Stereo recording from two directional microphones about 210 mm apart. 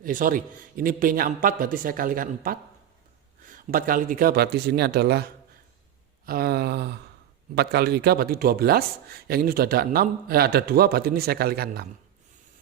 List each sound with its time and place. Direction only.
0.0 s a man's voice: 40° right (ahead or behind)